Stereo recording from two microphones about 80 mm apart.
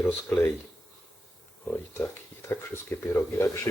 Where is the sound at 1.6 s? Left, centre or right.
Left.